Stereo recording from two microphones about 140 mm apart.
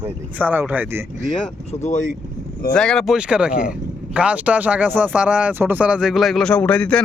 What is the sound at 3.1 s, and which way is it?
Speech, 5° right (ahead or behind).